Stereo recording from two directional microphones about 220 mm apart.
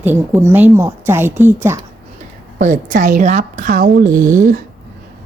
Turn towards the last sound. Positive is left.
turn(degrees=-35)  # may be behind; listen again after turning